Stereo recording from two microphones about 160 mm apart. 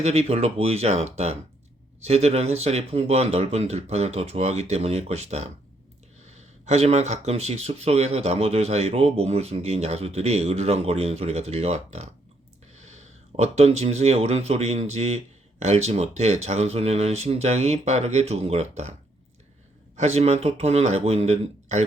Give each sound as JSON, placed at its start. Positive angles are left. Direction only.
{"t": 0.0, "sound": "speech", "side_deg": -40}
{"t": 20.0, "sound": "speech", "side_deg": -45}